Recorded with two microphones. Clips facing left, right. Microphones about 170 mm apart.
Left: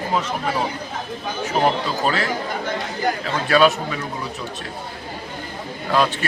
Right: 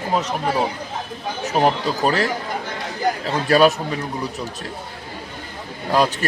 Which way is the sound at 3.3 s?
40° right (ahead or behind).